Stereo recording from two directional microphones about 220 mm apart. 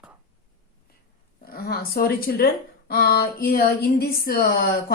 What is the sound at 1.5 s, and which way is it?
Speech, 45° left (ahead or behind).